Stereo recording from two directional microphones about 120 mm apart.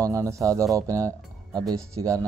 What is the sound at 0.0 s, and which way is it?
Speech, 25° right (ahead or behind).